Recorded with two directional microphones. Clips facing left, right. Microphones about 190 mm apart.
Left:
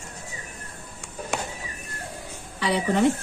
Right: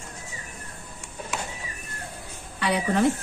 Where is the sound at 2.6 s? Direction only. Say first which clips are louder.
Left 1 dB; centre (ahead or behind).